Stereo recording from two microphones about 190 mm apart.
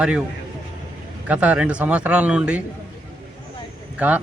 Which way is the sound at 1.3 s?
5° right (ahead or behind).